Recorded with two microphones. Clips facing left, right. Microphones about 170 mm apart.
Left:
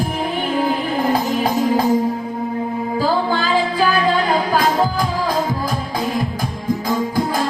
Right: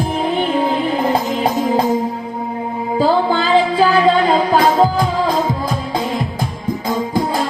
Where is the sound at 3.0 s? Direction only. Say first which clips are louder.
Right 5 dB; 20° right (ahead or behind).